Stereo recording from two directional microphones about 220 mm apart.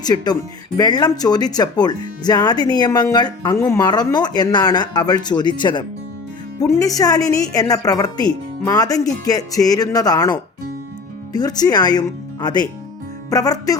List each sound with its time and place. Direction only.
0.0 s a woman's voice: 20° left (ahead or behind)